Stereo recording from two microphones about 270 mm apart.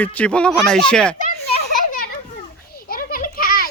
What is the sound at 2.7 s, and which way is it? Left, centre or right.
Children playing, left.